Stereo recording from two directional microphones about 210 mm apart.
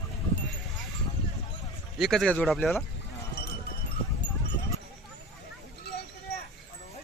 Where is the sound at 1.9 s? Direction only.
Centre (ahead or behind).